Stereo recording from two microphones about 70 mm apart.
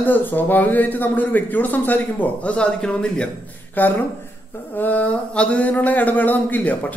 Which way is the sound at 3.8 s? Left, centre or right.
Left.